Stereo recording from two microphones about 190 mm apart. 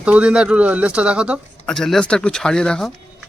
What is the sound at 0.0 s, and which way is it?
Speech, 5° right (ahead or behind).